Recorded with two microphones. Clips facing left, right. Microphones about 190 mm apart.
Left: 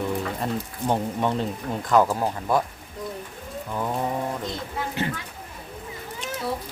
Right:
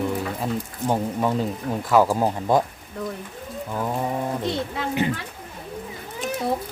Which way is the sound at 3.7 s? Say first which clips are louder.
Right 1 dB; 5° right (ahead or behind).